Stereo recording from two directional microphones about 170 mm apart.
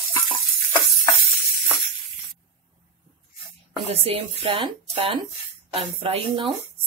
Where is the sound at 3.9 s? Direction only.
35° right (ahead or behind).